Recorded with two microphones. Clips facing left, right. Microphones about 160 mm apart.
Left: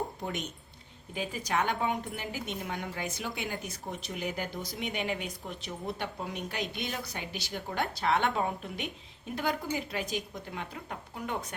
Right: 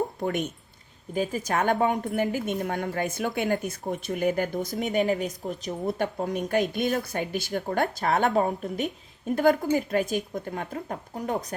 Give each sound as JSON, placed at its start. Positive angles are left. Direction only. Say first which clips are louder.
{"t": 0.2, "sound": "speech", "louder": "right 9 dB", "side_deg": -55}
{"t": 1.1, "sound": "speech", "louder": "right 6 dB", "side_deg": -45}